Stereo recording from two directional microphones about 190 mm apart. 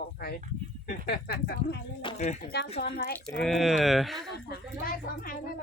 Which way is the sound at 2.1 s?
35° left (ahead or behind).